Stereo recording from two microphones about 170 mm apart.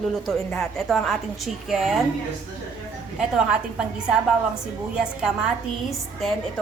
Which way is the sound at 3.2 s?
5° right (ahead or behind).